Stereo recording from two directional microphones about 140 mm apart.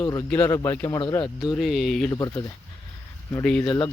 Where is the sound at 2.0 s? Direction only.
25° left (ahead or behind).